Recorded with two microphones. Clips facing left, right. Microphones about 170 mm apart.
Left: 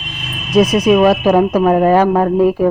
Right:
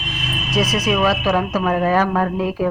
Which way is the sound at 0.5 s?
50° left (ahead or behind).